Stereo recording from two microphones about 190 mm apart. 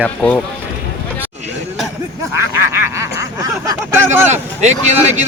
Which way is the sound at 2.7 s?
15° right (ahead or behind).